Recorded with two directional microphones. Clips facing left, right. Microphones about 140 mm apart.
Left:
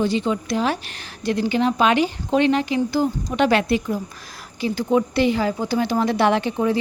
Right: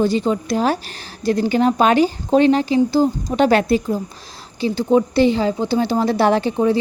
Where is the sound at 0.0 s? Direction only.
40° right (ahead or behind).